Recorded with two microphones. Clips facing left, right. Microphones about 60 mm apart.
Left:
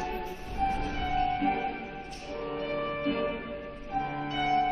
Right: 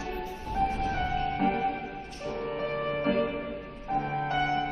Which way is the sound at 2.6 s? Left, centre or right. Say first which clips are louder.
Right 2 dB; right.